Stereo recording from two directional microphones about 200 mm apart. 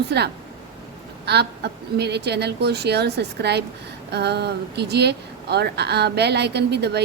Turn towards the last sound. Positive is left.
turn(degrees=-55)  # may be behind; listen again after turning